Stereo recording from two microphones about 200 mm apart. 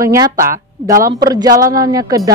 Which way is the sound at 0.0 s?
15° right (ahead or behind).